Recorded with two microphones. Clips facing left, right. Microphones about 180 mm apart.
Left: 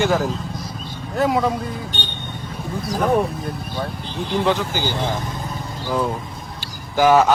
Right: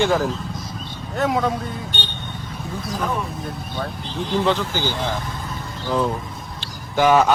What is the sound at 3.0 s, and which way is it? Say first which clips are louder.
Speech: left 8 dB; 60° left (ahead or behind).